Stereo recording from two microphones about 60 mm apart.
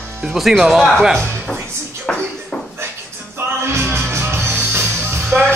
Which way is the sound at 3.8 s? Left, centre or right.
Right.